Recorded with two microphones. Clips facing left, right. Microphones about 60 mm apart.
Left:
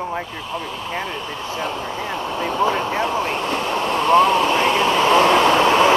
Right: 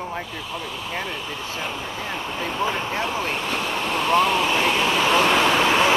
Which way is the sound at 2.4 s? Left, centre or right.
Centre.